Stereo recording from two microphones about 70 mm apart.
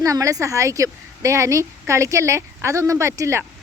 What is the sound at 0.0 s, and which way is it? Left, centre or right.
A woman's voice, right.